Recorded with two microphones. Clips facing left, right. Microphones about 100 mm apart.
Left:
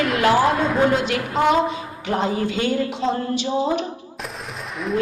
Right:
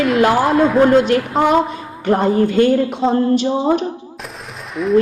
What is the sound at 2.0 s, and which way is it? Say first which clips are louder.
Speech: right 8 dB; 50° right (ahead or behind).